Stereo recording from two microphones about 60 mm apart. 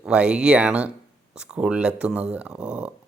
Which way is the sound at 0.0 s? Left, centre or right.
Centre.